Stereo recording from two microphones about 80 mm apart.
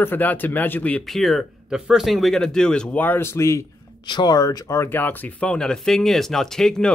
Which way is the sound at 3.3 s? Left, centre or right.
Left.